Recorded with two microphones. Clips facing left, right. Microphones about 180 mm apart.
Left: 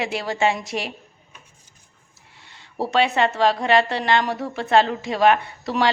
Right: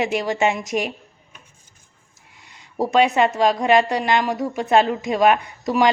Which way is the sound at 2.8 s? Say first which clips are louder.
Right 3 dB; 15° right (ahead or behind).